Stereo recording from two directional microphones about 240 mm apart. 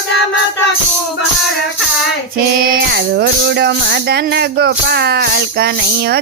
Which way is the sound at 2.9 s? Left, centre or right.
Right.